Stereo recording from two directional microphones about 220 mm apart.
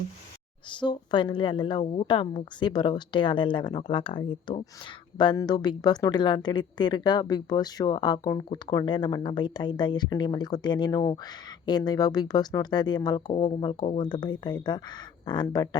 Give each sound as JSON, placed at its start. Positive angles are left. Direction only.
{"t": 0.7, "sound": "a woman's voice", "side_deg": 20}